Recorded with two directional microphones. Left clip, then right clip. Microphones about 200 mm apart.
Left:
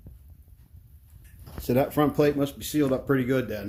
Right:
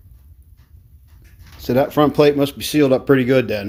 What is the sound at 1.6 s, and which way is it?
Speech, 5° right (ahead or behind).